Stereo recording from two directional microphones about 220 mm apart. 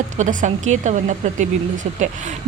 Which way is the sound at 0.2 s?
35° right (ahead or behind).